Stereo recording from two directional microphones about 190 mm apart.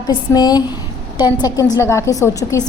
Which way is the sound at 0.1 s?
20° left (ahead or behind).